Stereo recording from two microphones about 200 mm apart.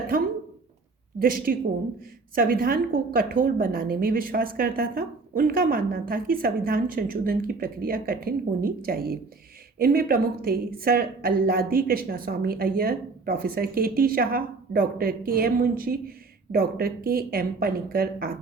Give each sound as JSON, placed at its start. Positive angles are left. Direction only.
{"t": 1.2, "sound": "a woman's voice", "side_deg": -45}